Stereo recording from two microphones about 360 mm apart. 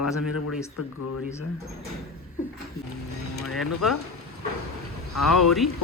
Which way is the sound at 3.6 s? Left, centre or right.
Centre.